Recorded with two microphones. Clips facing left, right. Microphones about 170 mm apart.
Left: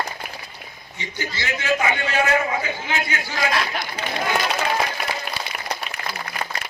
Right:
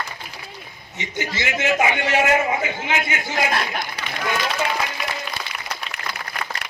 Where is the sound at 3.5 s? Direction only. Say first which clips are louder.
Even; 50° right (ahead or behind).